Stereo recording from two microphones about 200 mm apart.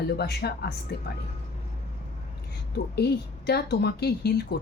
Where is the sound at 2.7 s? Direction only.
55° left (ahead or behind).